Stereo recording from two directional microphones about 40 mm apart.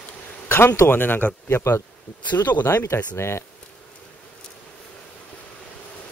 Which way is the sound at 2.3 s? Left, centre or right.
Left.